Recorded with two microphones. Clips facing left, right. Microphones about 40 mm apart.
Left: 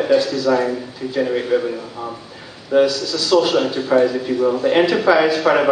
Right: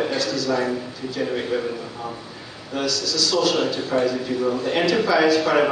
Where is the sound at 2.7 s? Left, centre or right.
Left.